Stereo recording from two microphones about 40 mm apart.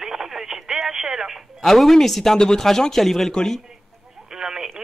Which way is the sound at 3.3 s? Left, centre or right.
Centre.